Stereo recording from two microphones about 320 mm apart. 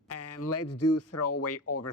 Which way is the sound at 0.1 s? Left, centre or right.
Left.